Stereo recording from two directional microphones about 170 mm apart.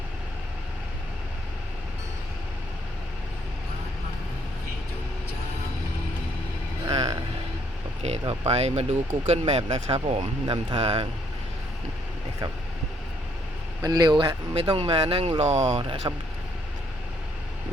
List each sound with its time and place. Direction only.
6.8 s vehicle: 25° right (ahead or behind)
8.3 s speech: 35° right (ahead or behind)
10.2 s speech: 25° right (ahead or behind)
13.8 s speech: 20° right (ahead or behind); by 15.8 s 40° right (ahead or behind)
15.8 s speech: 30° right (ahead or behind)